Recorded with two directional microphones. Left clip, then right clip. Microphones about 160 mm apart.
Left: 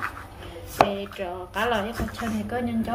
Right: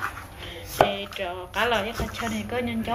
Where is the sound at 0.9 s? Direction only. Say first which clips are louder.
Right 1 dB; 15° left (ahead or behind).